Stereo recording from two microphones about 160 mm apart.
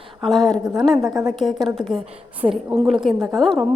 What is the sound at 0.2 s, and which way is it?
A woman's voice, centre (ahead or behind).